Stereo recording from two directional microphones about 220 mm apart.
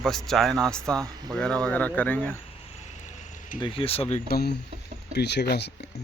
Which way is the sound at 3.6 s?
25° left (ahead or behind).